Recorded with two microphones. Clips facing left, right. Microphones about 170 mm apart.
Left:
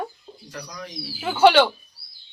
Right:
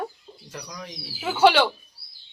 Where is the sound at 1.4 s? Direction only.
5° right (ahead or behind).